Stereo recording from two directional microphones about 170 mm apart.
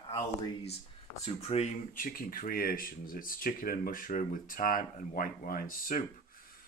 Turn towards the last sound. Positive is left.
turn(degrees=55)  # may be behind; listen again after turning